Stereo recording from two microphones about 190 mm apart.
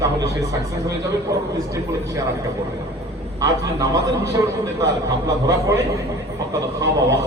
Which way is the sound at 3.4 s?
15° right (ahead or behind).